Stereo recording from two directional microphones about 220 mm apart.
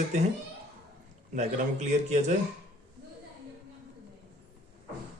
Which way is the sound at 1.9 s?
30° right (ahead or behind).